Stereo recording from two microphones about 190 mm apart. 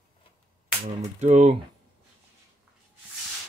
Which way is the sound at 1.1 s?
40° right (ahead or behind).